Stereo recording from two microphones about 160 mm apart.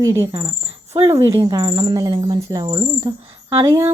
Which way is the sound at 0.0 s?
20° right (ahead or behind).